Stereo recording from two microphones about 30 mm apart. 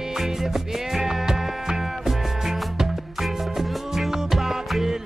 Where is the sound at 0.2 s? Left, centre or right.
Centre.